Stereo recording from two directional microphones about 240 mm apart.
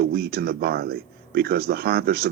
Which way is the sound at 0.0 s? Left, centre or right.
Right.